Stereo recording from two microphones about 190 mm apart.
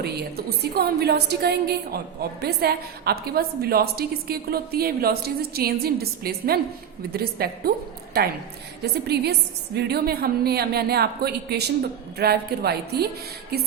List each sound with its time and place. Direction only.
0.0 s a woman's voice: 55° right (ahead or behind)
8.8 s a woman's voice: 60° right (ahead or behind)